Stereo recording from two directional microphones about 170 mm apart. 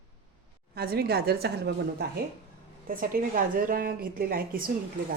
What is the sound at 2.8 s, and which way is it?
A woman's voice, 55° right (ahead or behind).